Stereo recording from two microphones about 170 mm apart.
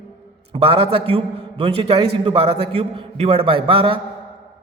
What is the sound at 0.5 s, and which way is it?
A man's voice, 35° right (ahead or behind).